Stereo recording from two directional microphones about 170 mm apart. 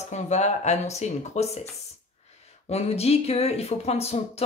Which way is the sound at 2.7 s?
40° left (ahead or behind).